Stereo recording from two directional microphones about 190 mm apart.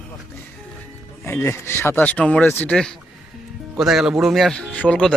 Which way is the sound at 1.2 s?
15° left (ahead or behind).